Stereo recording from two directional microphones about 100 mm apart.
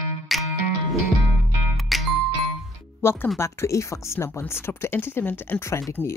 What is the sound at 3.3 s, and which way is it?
Speech, 30° left (ahead or behind).